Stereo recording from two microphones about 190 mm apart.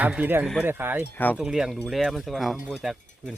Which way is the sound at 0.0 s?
10° right (ahead or behind).